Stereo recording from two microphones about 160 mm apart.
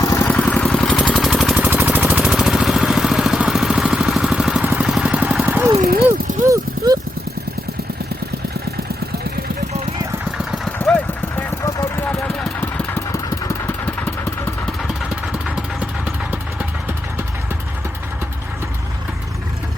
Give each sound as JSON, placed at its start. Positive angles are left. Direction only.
{"t": 0.0, "sound": "vehicle", "side_deg": 20}
{"t": 0.3, "sound": "vehicle", "side_deg": 10}
{"t": 5.8, "sound": "a sound", "side_deg": -70}
{"t": 6.4, "sound": "a sound", "side_deg": -20}
{"t": 10.8, "sound": "vehicle", "side_deg": 10}
{"t": 12.5, "sound": "vehicle", "side_deg": 15}
{"t": 15.3, "sound": "vehicle", "side_deg": -5}